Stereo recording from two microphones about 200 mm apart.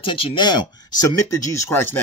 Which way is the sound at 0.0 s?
25° left (ahead or behind).